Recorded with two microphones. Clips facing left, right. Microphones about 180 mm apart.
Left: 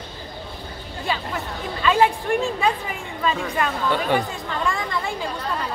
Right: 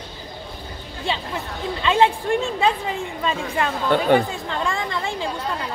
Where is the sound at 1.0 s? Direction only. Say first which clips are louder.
Even; 25° right (ahead or behind).